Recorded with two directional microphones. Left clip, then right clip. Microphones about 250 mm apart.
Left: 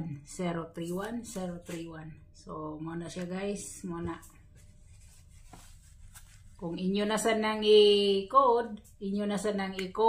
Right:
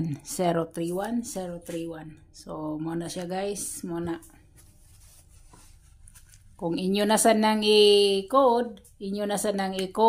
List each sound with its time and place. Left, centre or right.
0.0 s speech: right
6.5 s speech: right